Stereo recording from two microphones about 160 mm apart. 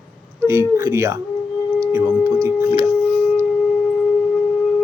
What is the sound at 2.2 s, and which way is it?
Sine wave, 20° right (ahead or behind).